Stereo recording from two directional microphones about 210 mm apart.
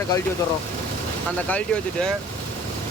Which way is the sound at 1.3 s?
5° left (ahead or behind).